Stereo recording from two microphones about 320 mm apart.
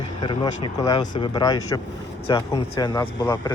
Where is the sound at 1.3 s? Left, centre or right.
Centre.